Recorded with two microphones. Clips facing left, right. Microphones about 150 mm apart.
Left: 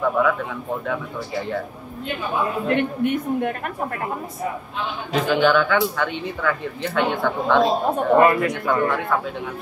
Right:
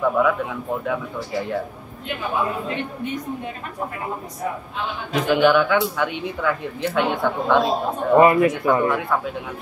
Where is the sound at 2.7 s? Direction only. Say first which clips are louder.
Left 7 dB; 60° left (ahead or behind).